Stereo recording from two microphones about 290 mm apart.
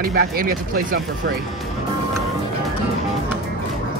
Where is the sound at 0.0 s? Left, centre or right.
Right.